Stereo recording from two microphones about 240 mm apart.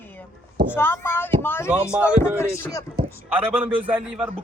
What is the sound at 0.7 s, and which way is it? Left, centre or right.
Speech, centre.